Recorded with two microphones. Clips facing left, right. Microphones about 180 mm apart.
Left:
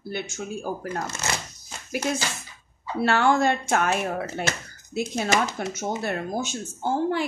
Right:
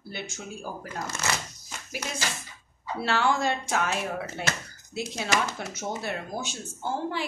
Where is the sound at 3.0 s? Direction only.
55° left (ahead or behind).